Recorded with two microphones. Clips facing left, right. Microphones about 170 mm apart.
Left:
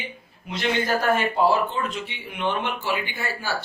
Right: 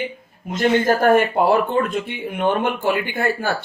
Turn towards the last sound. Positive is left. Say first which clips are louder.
# right 8 dB
turn(degrees=-55)  # may be behind; listen again after turning